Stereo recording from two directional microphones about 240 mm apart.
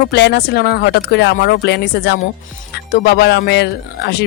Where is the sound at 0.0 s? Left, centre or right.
Left.